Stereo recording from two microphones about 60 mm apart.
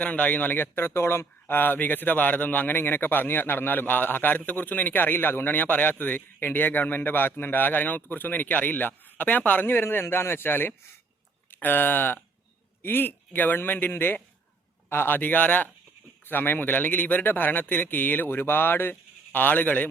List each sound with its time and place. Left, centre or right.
0.0 s a man's voice: left
1.5 s a man's voice: left